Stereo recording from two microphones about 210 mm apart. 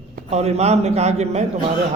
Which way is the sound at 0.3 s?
30° right (ahead or behind).